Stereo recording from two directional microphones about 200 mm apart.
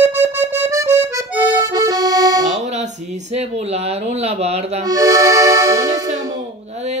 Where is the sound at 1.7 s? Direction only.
20° right (ahead or behind).